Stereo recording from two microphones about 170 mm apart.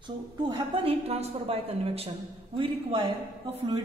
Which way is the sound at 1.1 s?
35° right (ahead or behind).